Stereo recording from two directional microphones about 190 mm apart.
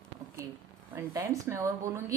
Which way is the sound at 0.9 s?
15° right (ahead or behind).